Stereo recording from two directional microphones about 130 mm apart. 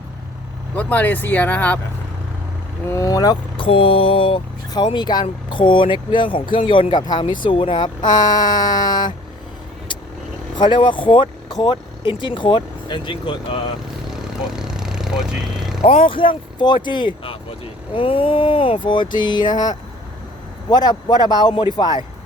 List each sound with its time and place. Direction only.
0.8 s speech: 10° left (ahead or behind)
2.9 s speech: 25° left (ahead or behind)
3.6 s speech: 45° left (ahead or behind)
10.6 s speech: 35° left (ahead or behind)
14.1 s vehicle: 5° right (ahead or behind)
15.8 s speech: 45° left (ahead or behind)